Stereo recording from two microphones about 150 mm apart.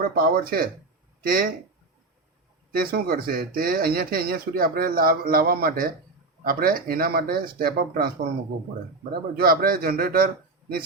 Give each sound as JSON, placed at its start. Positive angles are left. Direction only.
{"t": 0.0, "sound": "speech", "side_deg": -80}
{"t": 2.7, "sound": "speech", "side_deg": -85}
{"t": 9.4, "sound": "speech", "side_deg": -80}